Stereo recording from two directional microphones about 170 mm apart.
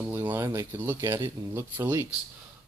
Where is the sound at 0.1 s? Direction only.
20° right (ahead or behind).